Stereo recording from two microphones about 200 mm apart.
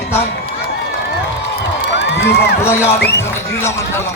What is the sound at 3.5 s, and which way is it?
Speech, 15° left (ahead or behind).